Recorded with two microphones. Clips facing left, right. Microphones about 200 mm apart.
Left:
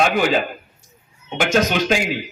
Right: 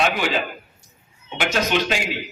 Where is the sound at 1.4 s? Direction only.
45° left (ahead or behind).